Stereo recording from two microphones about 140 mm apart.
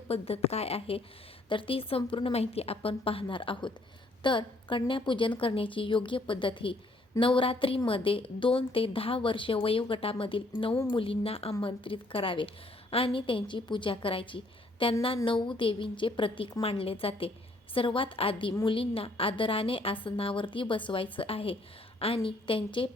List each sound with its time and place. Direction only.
0.1 s a woman's voice: 45° left (ahead or behind)